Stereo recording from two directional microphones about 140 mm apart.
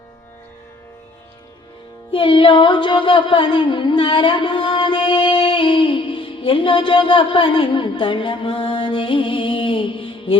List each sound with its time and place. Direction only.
2.1 s music: 40° left (ahead or behind)